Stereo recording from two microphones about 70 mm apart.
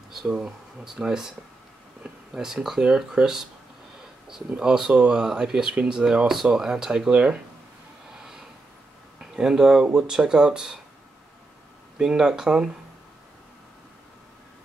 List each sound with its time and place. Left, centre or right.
0.1 s speech: centre
2.3 s speech: centre
4.5 s speech: centre
9.2 s speech: centre
12.0 s speech: centre